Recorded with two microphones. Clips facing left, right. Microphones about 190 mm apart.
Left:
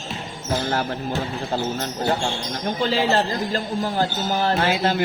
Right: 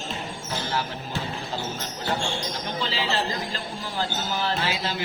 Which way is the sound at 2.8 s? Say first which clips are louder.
Left 8 dB; 45° left (ahead or behind).